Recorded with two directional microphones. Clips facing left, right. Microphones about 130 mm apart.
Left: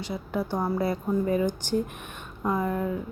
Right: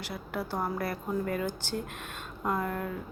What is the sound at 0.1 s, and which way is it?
A woman's voice, 10° left (ahead or behind).